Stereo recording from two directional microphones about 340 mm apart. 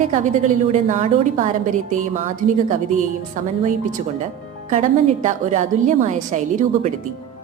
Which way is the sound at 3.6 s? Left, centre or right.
Right.